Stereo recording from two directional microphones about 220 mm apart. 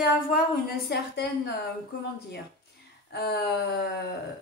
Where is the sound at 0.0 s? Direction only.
45° left (ahead or behind).